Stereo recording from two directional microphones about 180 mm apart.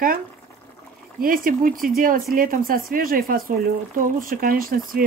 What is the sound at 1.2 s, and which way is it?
Speech, 50° right (ahead or behind).